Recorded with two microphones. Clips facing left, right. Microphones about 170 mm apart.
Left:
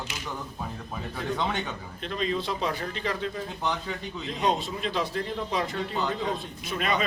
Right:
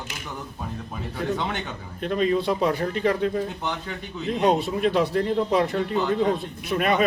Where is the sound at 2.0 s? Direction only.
50° right (ahead or behind).